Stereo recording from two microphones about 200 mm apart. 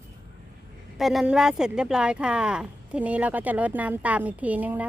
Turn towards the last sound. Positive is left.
turn(degrees=-10)  # may be behind; listen again after turning